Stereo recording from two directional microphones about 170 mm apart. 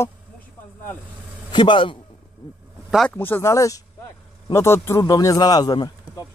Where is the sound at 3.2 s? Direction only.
15° left (ahead or behind).